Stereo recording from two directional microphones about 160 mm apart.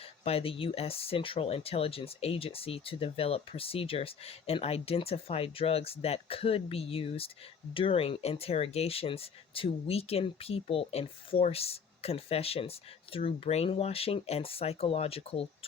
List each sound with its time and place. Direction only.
0.0 s speech: 35° left (ahead or behind)